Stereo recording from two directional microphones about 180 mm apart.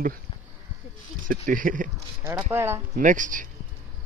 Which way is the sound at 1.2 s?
50° right (ahead or behind).